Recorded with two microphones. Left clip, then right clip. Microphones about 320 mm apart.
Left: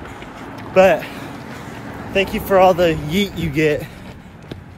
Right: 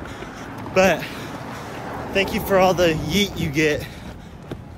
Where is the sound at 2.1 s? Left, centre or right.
Centre.